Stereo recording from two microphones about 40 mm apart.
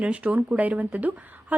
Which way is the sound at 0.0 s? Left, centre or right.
Right.